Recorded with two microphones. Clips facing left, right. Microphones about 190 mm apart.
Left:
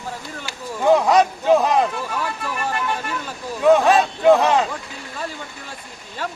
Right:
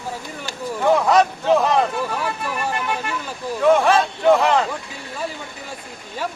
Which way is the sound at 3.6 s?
20° left (ahead or behind).